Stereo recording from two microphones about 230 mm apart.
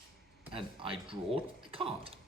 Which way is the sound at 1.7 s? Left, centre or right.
Right.